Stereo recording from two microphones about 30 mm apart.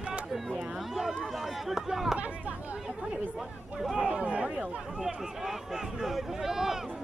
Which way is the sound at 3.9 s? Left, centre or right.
Right.